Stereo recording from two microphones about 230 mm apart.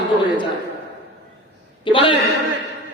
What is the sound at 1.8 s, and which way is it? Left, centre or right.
Speech, left.